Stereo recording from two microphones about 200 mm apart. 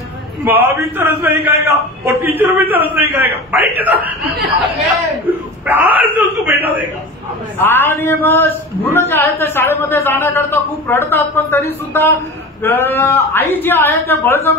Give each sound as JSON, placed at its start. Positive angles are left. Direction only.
{"t": 0.5, "sound": "a man's voice", "side_deg": -10}
{"t": 5.7, "sound": "a man's voice", "side_deg": -10}
{"t": 7.5, "sound": "a man's voice", "side_deg": 10}